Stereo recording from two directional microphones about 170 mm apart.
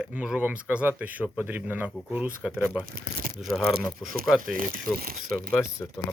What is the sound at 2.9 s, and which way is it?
Speech, 60° right (ahead or behind).